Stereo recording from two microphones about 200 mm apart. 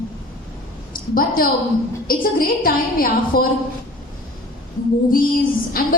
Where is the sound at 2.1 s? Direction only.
45° left (ahead or behind).